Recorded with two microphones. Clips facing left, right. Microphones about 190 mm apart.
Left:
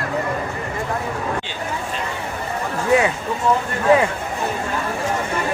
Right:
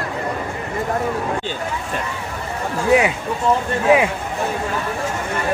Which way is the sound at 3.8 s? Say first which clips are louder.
Even; 15° right (ahead or behind).